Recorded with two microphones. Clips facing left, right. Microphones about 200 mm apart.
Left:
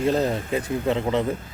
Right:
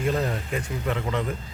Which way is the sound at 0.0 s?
30° left (ahead or behind).